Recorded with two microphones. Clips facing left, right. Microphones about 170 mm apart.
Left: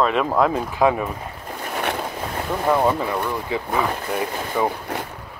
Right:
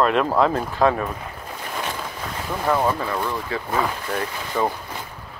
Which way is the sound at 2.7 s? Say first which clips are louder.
Left 2 dB; 15° left (ahead or behind).